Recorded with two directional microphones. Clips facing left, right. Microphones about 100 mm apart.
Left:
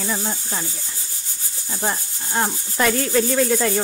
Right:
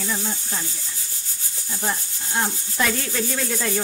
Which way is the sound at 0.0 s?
35° left (ahead or behind).